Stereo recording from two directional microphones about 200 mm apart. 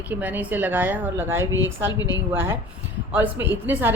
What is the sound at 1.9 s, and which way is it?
Speech, 20° left (ahead or behind).